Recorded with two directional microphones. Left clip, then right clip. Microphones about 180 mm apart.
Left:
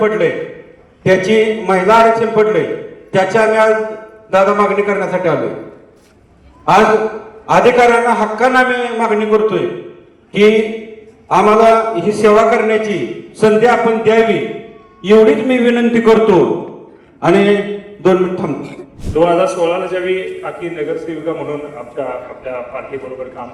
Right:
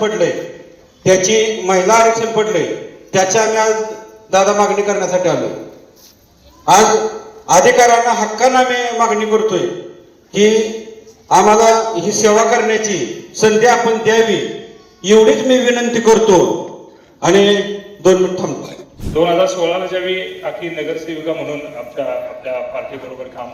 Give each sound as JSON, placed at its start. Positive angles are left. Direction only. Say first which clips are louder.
{"t": 0.0, "sound": "a man's voice", "louder": "left 2 dB", "side_deg": -35}
{"t": 6.7, "sound": "a man's voice", "louder": "even", "side_deg": -35}